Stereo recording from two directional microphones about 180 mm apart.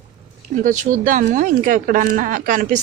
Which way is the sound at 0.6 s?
45° right (ahead or behind).